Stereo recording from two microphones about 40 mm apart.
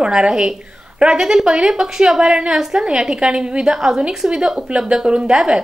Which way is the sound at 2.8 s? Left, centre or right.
Centre.